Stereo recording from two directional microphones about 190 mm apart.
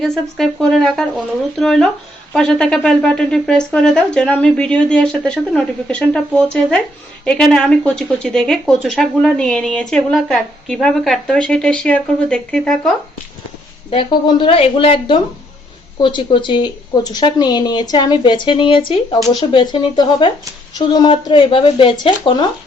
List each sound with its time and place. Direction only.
0.0 s speech: centre (ahead or behind)
13.9 s a woman's voice: 25° left (ahead or behind)